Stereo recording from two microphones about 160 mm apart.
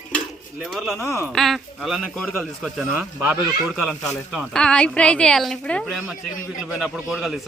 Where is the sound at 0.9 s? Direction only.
15° left (ahead or behind).